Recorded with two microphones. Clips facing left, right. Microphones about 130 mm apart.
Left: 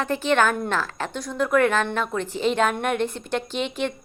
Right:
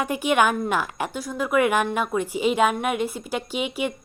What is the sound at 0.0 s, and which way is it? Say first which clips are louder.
A woman's voice: even; 15° right (ahead or behind).